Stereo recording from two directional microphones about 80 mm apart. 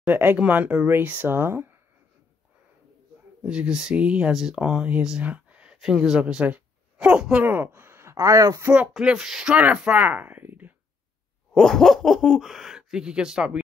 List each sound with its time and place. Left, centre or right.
0.0 s speech: right
3.4 s speech: centre
7.4 s speech: right
9.0 s speech: centre; by 10.7 s right
11.5 s speech: centre